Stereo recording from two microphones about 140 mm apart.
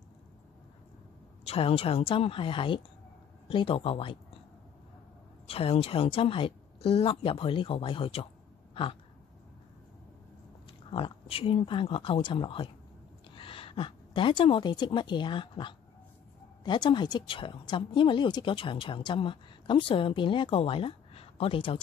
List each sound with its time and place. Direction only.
1.4 s speech: 45° left (ahead or behind)
5.5 s speech: 45° left (ahead or behind)
10.9 s a woman's voice: 40° left (ahead or behind)